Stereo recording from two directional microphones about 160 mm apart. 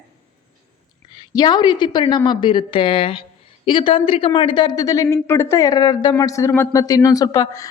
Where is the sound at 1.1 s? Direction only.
25° left (ahead or behind).